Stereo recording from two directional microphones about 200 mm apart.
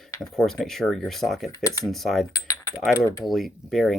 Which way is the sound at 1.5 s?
15° left (ahead or behind).